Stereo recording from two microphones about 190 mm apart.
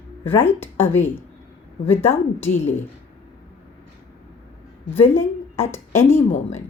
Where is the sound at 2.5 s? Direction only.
40° left (ahead or behind).